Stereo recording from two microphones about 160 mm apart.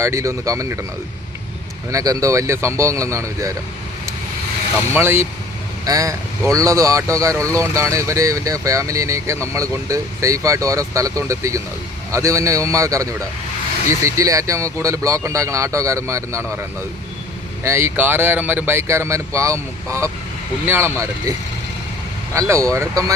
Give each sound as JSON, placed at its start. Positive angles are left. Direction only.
{"t": 0.0, "sound": "speech", "side_deg": -20}
{"t": 1.9, "sound": "speech", "side_deg": -20}
{"t": 4.9, "sound": "speech", "side_deg": -15}
{"t": 22.4, "sound": "speech", "side_deg": -20}